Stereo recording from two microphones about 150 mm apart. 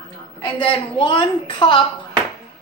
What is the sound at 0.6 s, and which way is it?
A woman's voice, 35° left (ahead or behind).